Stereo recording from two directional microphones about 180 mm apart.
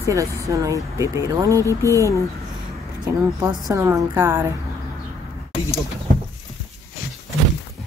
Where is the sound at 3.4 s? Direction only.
15° right (ahead or behind).